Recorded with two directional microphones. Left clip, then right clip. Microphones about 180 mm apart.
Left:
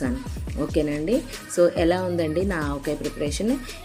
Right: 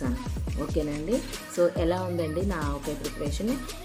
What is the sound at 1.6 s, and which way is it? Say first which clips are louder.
Speech: left 5 dB; 15° left (ahead or behind).